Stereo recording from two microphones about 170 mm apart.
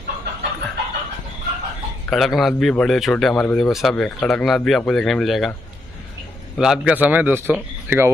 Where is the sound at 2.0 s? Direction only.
Centre (ahead or behind).